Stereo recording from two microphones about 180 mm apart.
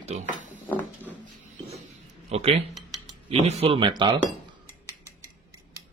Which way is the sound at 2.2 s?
35° right (ahead or behind).